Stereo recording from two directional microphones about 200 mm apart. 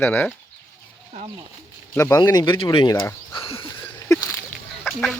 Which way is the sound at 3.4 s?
25° left (ahead or behind).